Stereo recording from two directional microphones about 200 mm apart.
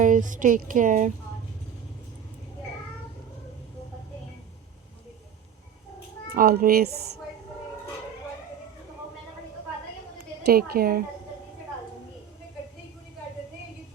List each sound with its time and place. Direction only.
0.0 s speech: 40° right (ahead or behind)
6.3 s a child's voice: 45° right (ahead or behind)
10.2 s a woman's voice: 50° right (ahead or behind)